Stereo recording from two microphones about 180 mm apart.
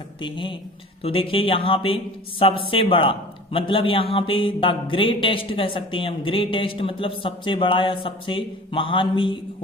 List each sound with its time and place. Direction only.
0.2 s a man's voice: 25° left (ahead or behind)